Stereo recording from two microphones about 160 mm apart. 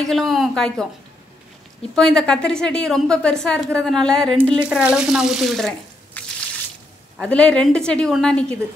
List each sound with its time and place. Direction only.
0.0 s a woman's voice: centre (ahead or behind)
2.0 s a woman's voice: 5° left (ahead or behind)